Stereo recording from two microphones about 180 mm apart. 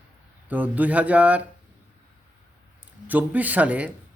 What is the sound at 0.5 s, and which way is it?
Speech, 10° right (ahead or behind).